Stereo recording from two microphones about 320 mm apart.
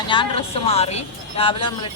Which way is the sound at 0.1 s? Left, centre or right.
Centre.